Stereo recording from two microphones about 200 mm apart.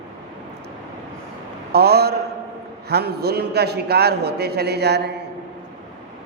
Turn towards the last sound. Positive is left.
turn(degrees=-55)  # may be behind; listen again after turning